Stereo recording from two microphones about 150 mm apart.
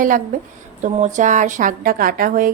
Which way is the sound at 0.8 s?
50° right (ahead or behind).